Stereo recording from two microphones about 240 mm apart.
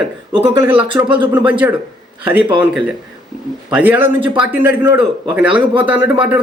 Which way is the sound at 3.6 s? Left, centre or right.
Centre.